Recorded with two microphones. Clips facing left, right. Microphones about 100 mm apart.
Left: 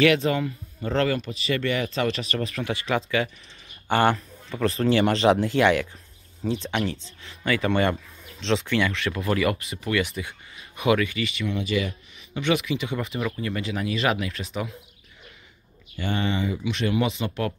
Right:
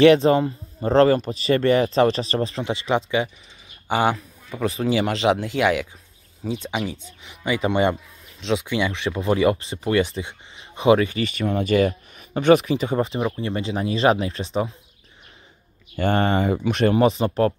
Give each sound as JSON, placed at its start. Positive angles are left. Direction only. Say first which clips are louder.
{"t": 0.0, "sound": "speech", "louder": "right 7 dB", "side_deg": -35}
{"t": 3.8, "sound": "speech", "louder": "even", "side_deg": -10}
{"t": 8.4, "sound": "speech", "louder": "right 1 dB", "side_deg": -5}
{"t": 8.6, "sound": "speech", "louder": "right 1 dB", "side_deg": -15}
{"t": 16.0, "sound": "speech", "louder": "right 6 dB", "side_deg": -50}